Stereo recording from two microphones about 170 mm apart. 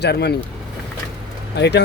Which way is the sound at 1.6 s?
80° left.